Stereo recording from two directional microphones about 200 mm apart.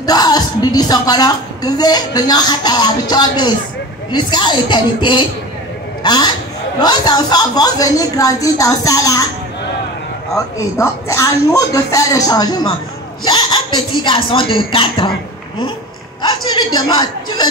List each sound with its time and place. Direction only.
0.0 s a woman's voice: 20° left (ahead or behind)
10.3 s a woman's voice: 15° left (ahead or behind)
16.2 s a woman's voice: 20° left (ahead or behind)